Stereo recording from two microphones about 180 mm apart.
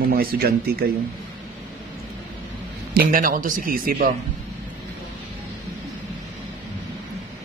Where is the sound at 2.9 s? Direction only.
55° right (ahead or behind).